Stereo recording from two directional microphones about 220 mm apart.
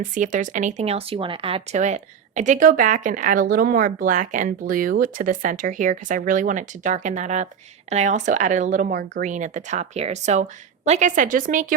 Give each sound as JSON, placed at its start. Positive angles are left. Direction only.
{"t": 0.0, "sound": "speech", "side_deg": -35}